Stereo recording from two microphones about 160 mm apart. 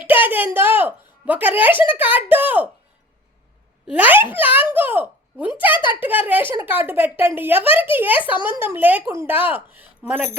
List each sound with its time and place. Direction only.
0.3 s a woman's voice: 10° right (ahead or behind)
3.8 s speech: 10° right (ahead or behind)
5.7 s speech: 30° left (ahead or behind)
6.0 s speech: 10° right (ahead or behind)